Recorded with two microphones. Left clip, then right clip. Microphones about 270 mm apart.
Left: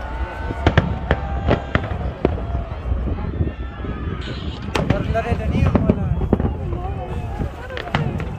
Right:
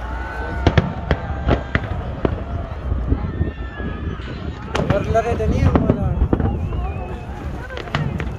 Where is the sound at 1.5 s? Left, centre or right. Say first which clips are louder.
Left 1 dB; left.